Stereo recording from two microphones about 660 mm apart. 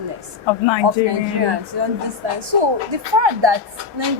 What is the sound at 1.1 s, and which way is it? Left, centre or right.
A woman's voice, right.